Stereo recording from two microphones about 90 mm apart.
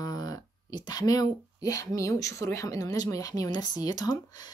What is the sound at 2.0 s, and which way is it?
Speech, 35° left (ahead or behind).